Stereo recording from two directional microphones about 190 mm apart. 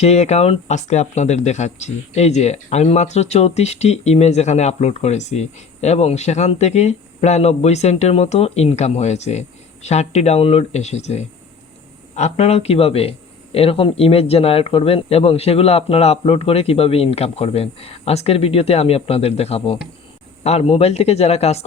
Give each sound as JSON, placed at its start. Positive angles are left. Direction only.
{"t": 0.0, "sound": "speech", "side_deg": 35}